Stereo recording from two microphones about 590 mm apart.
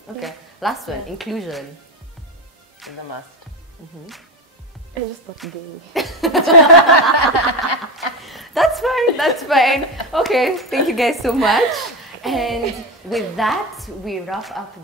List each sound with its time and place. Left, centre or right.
0.2 s a woman's voice: centre
2.8 s speech: centre
5.9 s a sound: centre
6.9 s snicker: left
8.2 s a woman's voice: centre